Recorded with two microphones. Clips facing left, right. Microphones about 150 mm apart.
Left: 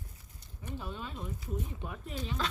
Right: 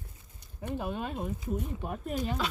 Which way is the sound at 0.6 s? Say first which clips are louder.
Right 7 dB; 60° right (ahead or behind).